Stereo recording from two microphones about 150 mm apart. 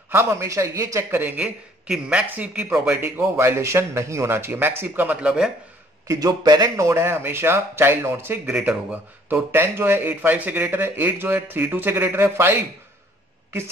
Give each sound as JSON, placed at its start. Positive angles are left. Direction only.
{"t": 0.1, "sound": "a man's voice", "side_deg": -15}
{"t": 6.0, "sound": "a man's voice", "side_deg": -25}